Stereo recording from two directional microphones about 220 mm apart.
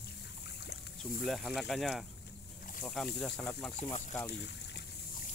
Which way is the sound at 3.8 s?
30° left (ahead or behind).